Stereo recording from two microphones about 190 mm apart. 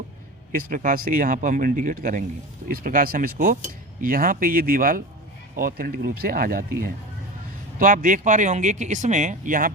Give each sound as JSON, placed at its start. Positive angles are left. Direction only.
{"t": 0.5, "sound": "a man's voice", "side_deg": -45}